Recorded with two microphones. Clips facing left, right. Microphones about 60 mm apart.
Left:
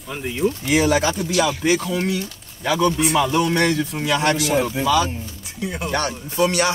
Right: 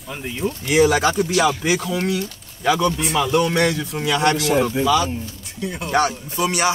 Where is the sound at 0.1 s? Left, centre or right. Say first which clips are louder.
Left 3 dB; centre.